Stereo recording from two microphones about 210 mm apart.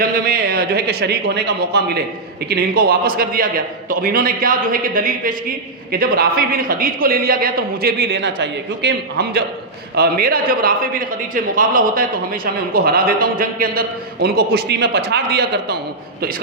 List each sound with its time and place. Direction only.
0.0 s a man's voice: 45° right (ahead or behind)